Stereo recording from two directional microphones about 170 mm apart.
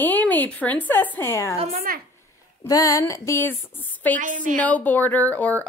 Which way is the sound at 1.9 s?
55° right (ahead or behind).